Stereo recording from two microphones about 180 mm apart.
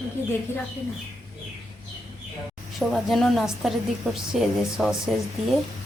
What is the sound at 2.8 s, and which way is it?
A woman's voice, centre (ahead or behind).